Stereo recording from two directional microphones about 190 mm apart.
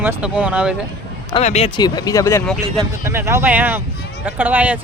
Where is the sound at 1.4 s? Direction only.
35° left (ahead or behind).